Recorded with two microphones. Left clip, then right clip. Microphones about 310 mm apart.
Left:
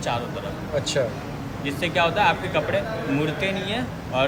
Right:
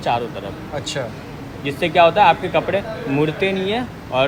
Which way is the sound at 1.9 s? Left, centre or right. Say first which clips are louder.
Right 8 dB; centre.